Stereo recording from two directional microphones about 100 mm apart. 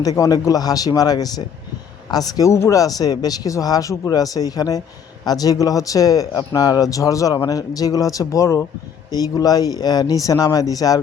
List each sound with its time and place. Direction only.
0.0 s speech: 35° left (ahead or behind)